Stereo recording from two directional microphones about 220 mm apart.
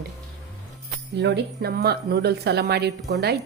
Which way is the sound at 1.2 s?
50° right (ahead or behind).